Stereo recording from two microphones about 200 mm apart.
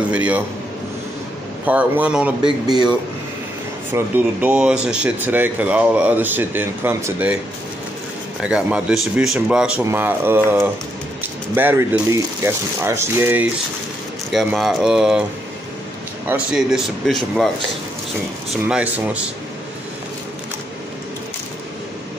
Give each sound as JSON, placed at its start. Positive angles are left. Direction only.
{"t": 0.1, "sound": "speech", "side_deg": -5}
{"t": 1.7, "sound": "speech", "side_deg": -5}
{"t": 2.4, "sound": "speech", "side_deg": -20}
{"t": 3.9, "sound": "speech", "side_deg": -5}
{"t": 8.4, "sound": "speech", "side_deg": -5}
{"t": 16.3, "sound": "speech", "side_deg": 0}
{"t": 18.5, "sound": "speech", "side_deg": -5}